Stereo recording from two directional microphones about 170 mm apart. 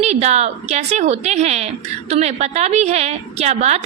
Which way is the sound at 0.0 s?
40° right (ahead or behind).